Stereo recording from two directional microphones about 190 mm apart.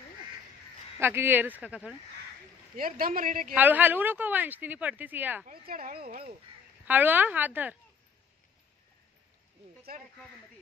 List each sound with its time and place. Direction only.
0.9 s speech: 10° right (ahead or behind)
2.8 s a woman's voice: 45° right (ahead or behind)
3.5 s speech: 10° right (ahead or behind)
5.5 s a woman's voice: 50° right (ahead or behind)
6.9 s speech: 10° right (ahead or behind)